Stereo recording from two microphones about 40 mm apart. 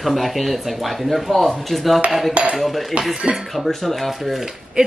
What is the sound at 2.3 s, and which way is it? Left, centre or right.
Speech, right.